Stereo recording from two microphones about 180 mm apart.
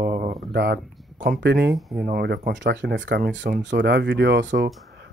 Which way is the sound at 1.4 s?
70° right (ahead or behind).